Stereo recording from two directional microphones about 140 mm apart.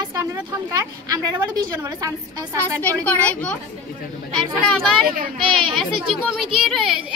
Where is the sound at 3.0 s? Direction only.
10° left (ahead or behind).